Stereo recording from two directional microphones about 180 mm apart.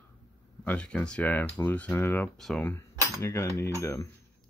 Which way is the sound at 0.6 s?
5° left (ahead or behind).